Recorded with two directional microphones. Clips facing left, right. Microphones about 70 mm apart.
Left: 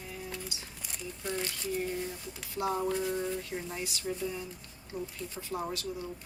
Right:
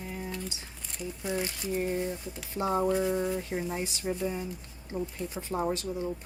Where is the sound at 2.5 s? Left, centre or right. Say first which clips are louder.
Right 4 dB; right.